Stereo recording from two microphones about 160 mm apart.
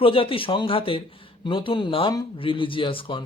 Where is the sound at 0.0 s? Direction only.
35° left (ahead or behind).